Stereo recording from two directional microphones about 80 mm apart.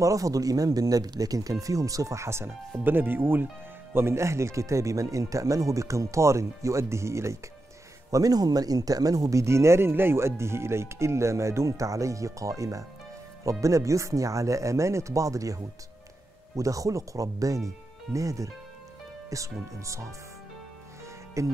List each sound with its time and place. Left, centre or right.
0.0 s speech: right
8.1 s speech: right
21.4 s speech: right